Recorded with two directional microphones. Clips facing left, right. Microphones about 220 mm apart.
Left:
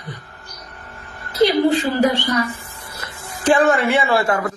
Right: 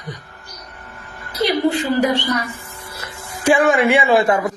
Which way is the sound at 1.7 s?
15° right (ahead or behind).